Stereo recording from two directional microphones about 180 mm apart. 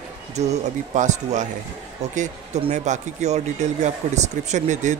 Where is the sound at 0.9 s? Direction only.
40° right (ahead or behind).